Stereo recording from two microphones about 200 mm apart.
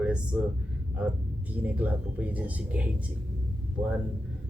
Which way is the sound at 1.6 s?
10° right (ahead or behind).